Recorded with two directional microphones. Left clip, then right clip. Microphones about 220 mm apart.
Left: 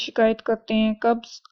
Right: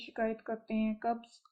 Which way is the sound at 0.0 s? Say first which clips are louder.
Left 15 dB; 40° left (ahead or behind).